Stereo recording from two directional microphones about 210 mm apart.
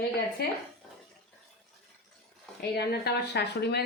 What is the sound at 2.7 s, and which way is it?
A woman's voice, 50° left (ahead or behind).